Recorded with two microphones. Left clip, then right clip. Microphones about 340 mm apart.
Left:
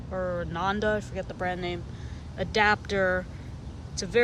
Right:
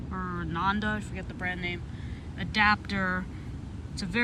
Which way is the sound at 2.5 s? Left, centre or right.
Centre.